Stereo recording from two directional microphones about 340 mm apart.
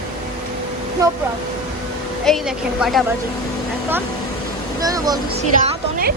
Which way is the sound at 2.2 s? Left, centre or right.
Centre.